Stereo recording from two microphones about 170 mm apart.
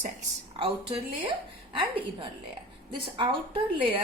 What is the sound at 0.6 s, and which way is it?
A woman's voice, 35° right (ahead or behind).